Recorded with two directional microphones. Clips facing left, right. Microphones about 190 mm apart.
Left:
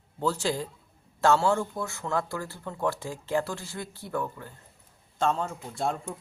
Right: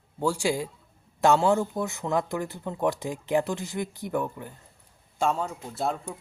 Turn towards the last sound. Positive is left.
turn(degrees=0)  # may be behind; listen again after turning